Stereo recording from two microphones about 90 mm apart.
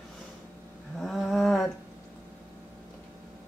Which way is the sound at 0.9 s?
Centre (ahead or behind).